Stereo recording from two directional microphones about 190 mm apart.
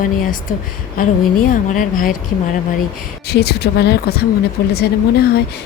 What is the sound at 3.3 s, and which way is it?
Speech, 60° left (ahead or behind).